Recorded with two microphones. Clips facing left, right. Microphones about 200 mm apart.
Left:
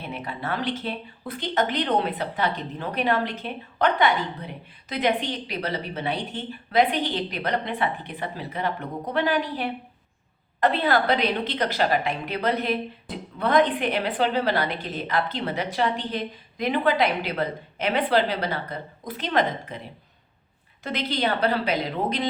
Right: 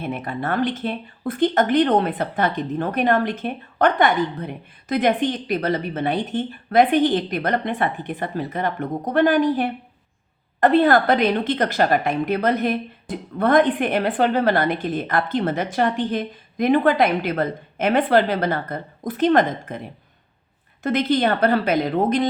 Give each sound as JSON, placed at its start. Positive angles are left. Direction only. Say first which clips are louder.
{"t": 0.0, "sound": "speech", "louder": "right 6 dB", "side_deg": -50}
{"t": 20.8, "sound": "speech", "louder": "right 7 dB", "side_deg": -50}